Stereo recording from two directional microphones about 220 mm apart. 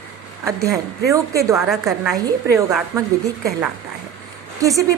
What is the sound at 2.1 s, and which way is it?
Speech, 15° right (ahead or behind).